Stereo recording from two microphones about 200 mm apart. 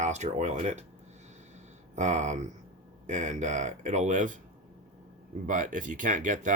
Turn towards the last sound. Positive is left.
turn(degrees=-40)  # may be behind; listen again after turning